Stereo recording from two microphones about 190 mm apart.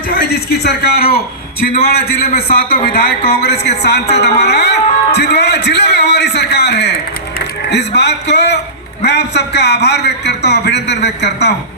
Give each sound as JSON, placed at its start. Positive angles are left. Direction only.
{"t": 0.1, "sound": "a man's voice", "side_deg": 60}